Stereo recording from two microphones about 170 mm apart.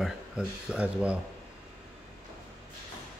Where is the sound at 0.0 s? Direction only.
5° right (ahead or behind).